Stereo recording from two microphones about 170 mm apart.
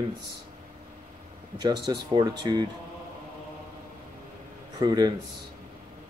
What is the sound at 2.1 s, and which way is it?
Speech, 25° right (ahead or behind).